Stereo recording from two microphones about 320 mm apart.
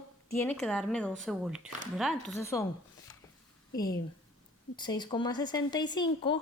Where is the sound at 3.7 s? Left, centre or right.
Centre.